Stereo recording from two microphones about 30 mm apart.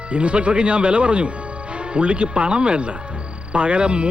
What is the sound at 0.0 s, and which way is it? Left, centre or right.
Speech, right.